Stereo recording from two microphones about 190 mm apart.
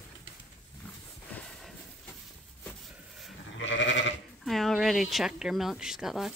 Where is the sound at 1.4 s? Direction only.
5° left (ahead or behind).